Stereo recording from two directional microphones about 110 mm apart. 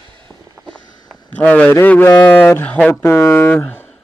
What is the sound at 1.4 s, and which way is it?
A man's voice, 15° left (ahead or behind).